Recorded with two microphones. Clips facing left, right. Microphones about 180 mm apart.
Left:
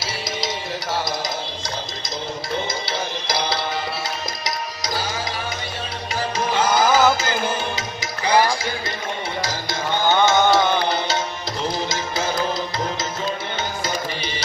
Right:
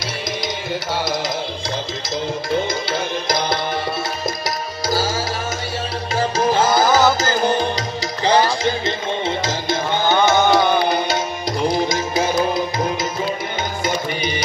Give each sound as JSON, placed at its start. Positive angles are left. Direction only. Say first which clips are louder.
{"t": 4.8, "sound": "tabla", "louder": "right 9 dB", "side_deg": -30}
{"t": 6.3, "sound": "music", "louder": "right 3 dB", "side_deg": -40}
{"t": 9.4, "sound": "music", "louder": "right 4 dB", "side_deg": -20}